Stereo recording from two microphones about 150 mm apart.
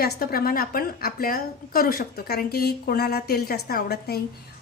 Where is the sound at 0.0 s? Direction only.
90° left.